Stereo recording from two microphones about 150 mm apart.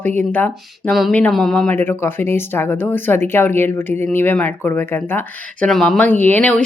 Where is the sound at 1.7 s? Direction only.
15° left (ahead or behind).